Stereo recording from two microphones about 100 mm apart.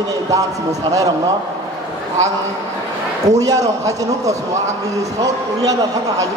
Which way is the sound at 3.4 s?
35° right (ahead or behind).